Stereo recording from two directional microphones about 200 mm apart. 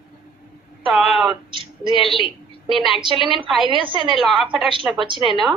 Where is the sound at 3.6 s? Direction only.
25° right (ahead or behind).